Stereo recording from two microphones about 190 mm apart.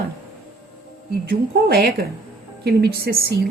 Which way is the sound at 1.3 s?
55° right (ahead or behind).